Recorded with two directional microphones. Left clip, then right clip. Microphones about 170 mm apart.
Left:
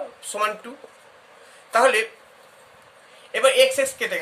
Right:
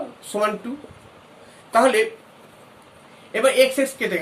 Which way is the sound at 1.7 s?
40° left (ahead or behind).